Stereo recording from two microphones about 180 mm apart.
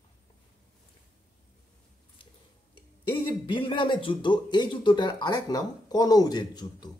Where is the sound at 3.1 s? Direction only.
25° left (ahead or behind).